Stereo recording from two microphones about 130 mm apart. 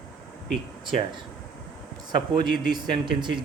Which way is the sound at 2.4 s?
90° left.